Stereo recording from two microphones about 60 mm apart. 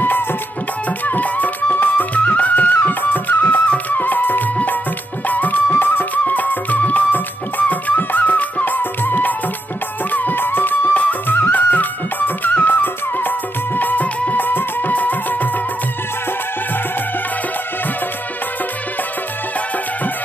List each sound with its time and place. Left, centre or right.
0.8 s music: left